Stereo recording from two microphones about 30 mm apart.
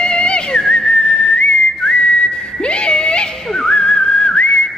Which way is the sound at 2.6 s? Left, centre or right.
Left.